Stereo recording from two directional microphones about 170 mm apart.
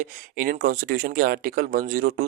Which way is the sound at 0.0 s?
55° right (ahead or behind).